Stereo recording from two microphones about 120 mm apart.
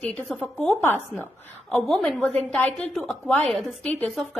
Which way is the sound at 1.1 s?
15° left (ahead or behind).